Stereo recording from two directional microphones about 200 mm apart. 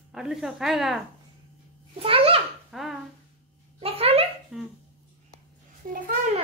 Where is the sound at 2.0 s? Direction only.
30° right (ahead or behind).